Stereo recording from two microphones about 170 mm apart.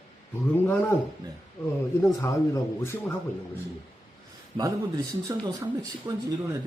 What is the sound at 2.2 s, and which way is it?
Speech, 15° left (ahead or behind).